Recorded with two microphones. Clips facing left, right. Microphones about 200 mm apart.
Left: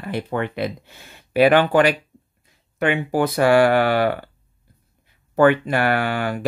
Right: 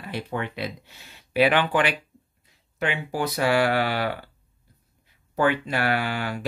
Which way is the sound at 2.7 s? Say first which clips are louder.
Left 7 dB; 55° left (ahead or behind).